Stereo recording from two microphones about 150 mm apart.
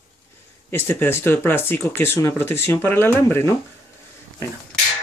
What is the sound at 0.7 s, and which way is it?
Speech, 15° left (ahead or behind).